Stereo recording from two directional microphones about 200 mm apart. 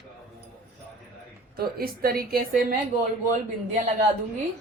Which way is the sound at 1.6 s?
50° right (ahead or behind).